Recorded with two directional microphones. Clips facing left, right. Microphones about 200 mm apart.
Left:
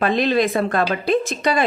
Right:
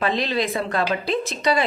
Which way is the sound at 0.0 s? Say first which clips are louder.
Left 5 dB; 50° left (ahead or behind).